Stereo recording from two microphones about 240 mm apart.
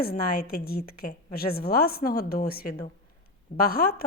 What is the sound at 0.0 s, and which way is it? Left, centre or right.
A woman's voice, left.